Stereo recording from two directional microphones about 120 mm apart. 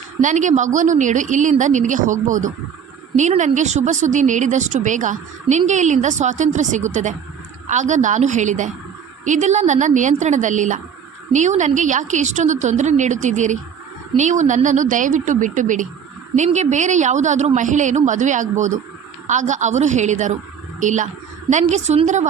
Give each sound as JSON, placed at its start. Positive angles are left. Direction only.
{"t": 0.2, "sound": "speech", "side_deg": -90}
{"t": 16.3, "sound": "a woman's voice", "side_deg": -80}
{"t": 21.5, "sound": "a woman's voice", "side_deg": -75}